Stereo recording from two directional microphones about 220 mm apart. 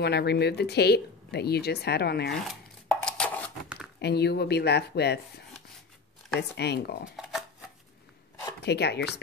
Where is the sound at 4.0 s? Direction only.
50° left (ahead or behind).